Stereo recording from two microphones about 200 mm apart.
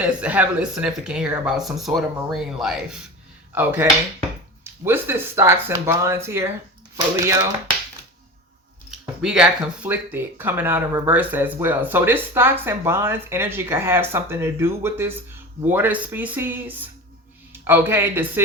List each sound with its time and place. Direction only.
0.2 s speech: 5° right (ahead or behind)
8.9 s speech: 5° right (ahead or behind)